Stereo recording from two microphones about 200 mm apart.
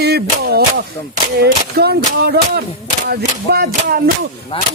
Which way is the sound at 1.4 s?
55° right (ahead or behind).